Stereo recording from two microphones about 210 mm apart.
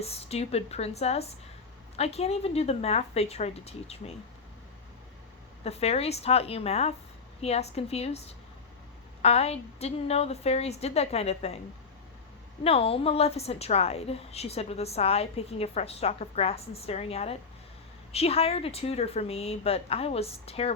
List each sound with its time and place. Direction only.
0.0 s a woman's voice: 30° left (ahead or behind)
5.6 s a woman's voice: 30° left (ahead or behind)
12.6 s a woman's voice: 25° left (ahead or behind)